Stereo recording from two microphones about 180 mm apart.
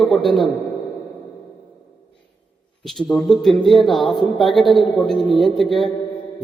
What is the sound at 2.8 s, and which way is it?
A man's voice, centre (ahead or behind).